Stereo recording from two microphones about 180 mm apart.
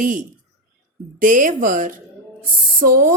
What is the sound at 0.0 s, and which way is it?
Speech, 45° right (ahead or behind).